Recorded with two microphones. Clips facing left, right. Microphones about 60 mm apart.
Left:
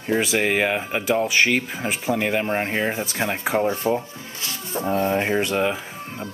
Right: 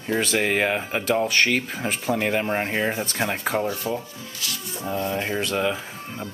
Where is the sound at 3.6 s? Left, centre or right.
Left.